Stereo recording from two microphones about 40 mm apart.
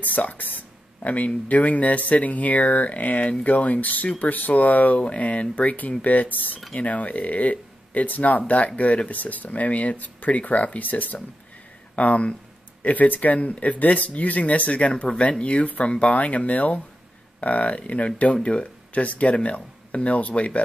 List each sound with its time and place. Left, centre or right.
0.0 s speech: left
5.0 s speech: left
6.7 s speech: left